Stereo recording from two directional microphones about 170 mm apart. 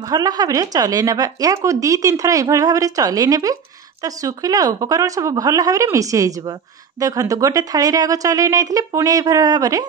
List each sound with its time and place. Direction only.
0.0 s speech: 20° right (ahead or behind)